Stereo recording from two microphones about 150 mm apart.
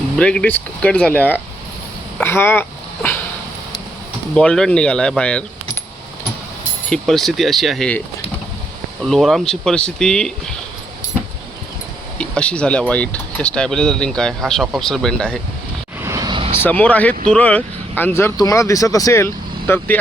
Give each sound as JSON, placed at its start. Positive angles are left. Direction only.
{"t": 0.2, "sound": "speech", "side_deg": 5}
{"t": 4.4, "sound": "speech", "side_deg": 5}
{"t": 6.9, "sound": "speech", "side_deg": 0}
{"t": 9.0, "sound": "speech", "side_deg": 0}
{"t": 12.1, "sound": "speech", "side_deg": 10}
{"t": 16.0, "sound": "vehicle", "side_deg": -20}
{"t": 16.6, "sound": "speech", "side_deg": 10}